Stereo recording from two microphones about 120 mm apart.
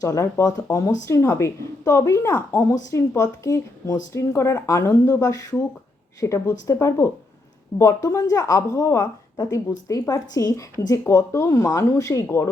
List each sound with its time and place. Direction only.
0.0 s a woman's voice: 25° left (ahead or behind)